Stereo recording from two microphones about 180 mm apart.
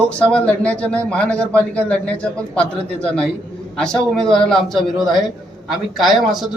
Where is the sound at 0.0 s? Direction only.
5° left (ahead or behind).